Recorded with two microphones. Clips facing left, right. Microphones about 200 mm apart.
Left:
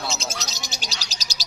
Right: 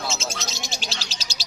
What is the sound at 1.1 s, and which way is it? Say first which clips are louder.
Bird: right 1 dB; 40° left (ahead or behind).